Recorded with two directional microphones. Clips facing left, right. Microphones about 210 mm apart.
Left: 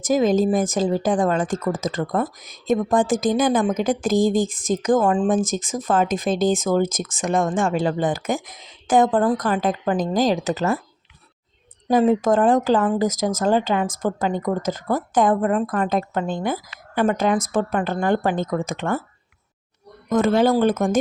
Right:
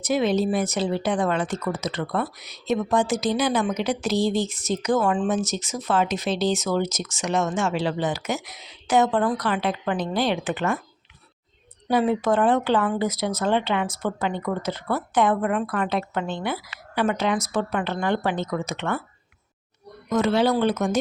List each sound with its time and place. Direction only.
0.1 s a woman's voice: 45° left (ahead or behind)
11.9 s speech: 45° left (ahead or behind)
15.4 s speech: 35° left (ahead or behind)
20.1 s speech: 50° left (ahead or behind)